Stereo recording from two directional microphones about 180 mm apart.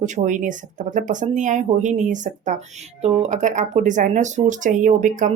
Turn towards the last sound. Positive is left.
turn(degrees=-45)  # may be behind; listen again after turning